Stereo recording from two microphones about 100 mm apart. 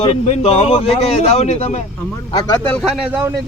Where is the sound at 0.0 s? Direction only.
75° left (ahead or behind).